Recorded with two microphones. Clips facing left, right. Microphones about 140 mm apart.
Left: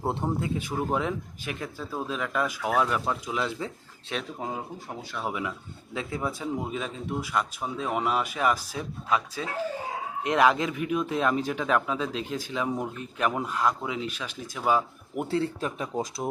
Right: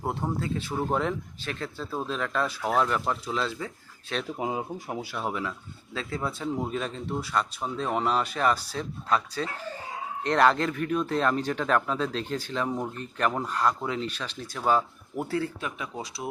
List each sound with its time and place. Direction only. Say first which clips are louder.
0.1 s speech: left 1 dB; 20° left (ahead or behind)
0.7 s speech: right 2 dB; 5° left (ahead or behind)
4.4 s speech: right 4 dB; 10° right (ahead or behind)
5.3 s speech: even; 15° left (ahead or behind)
15.8 s speech: left 5 dB; 45° left (ahead or behind)